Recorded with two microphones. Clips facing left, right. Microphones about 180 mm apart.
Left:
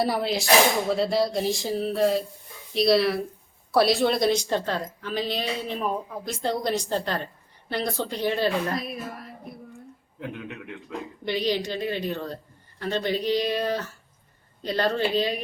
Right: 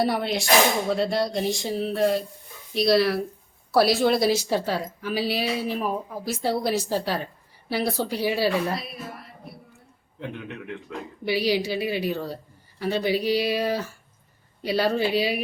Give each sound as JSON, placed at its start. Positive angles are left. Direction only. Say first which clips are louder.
{"t": 0.0, "sound": "a woman's voice", "louder": "right 1 dB", "side_deg": 0}
{"t": 10.2, "sound": "speech", "louder": "right 1 dB", "side_deg": 5}
{"t": 11.3, "sound": "a woman's voice", "louder": "right 2 dB", "side_deg": -10}